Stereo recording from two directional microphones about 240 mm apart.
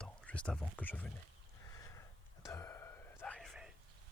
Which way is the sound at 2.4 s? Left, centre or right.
Centre.